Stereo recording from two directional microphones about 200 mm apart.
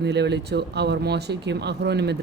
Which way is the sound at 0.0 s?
60° right (ahead or behind).